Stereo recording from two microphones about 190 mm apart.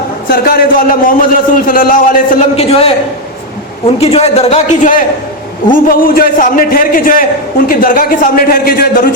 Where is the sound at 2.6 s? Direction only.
30° left (ahead or behind); by 9.0 s 50° left (ahead or behind).